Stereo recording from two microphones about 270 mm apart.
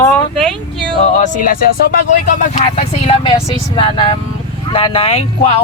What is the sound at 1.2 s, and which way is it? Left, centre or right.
Speech, left.